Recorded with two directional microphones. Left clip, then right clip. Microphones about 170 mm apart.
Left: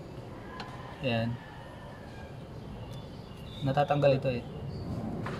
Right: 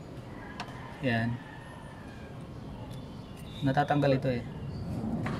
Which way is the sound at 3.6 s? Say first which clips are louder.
Left 1 dB; 25° right (ahead or behind).